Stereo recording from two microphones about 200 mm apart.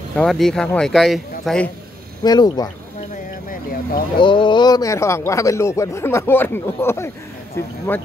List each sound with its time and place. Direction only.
0.1 s speech: centre (ahead or behind)
2.2 s speech: 20° left (ahead or behind)
4.2 s speech: 25° left (ahead or behind)